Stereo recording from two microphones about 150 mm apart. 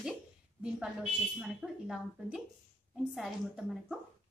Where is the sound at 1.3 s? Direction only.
Centre (ahead or behind).